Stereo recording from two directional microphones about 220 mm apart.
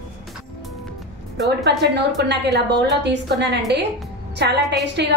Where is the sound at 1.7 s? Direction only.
50° right (ahead or behind).